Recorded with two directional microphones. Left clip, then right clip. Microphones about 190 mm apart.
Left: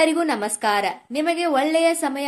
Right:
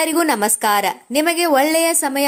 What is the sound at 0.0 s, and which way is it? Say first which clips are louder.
A woman's voice: right 3 dB; 45° right (ahead or behind).